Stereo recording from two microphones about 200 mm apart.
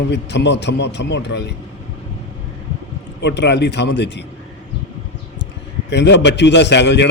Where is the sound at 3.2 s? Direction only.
60° left (ahead or behind).